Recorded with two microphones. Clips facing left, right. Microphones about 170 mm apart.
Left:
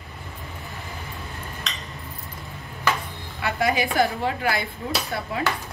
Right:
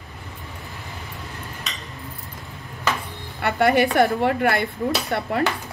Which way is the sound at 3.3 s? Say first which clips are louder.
Right 5 dB; 65° right (ahead or behind).